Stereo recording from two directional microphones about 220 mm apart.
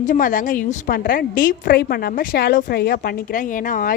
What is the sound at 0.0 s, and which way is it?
A woman's voice, 35° left (ahead or behind).